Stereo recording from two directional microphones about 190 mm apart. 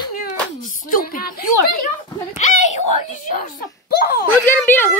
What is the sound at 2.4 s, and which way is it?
A child's voice, 40° left (ahead or behind).